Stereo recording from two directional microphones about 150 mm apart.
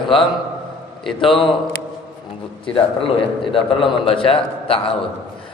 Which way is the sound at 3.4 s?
35° left (ahead or behind).